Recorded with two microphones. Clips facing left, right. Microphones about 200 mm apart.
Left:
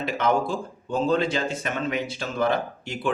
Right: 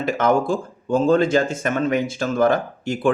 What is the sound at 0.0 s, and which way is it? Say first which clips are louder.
Speech: right 5 dB; 45° right (ahead or behind).